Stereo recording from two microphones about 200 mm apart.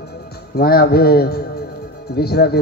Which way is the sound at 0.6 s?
50° left (ahead or behind).